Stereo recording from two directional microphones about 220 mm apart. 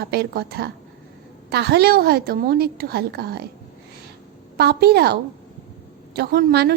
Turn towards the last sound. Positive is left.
turn(degrees=-45)  # may be behind; listen again after turning